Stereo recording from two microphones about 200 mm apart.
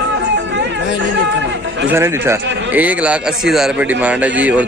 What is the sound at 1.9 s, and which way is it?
A man's voice, 15° right (ahead or behind).